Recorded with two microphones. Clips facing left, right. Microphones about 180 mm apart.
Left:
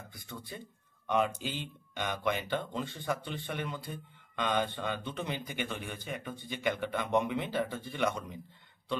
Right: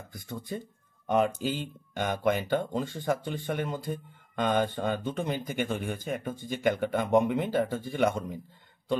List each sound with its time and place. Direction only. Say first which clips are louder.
0.1 s speech: right 11 dB; 45° right (ahead or behind)